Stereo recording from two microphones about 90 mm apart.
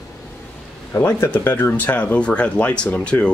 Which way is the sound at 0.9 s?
30° left (ahead or behind).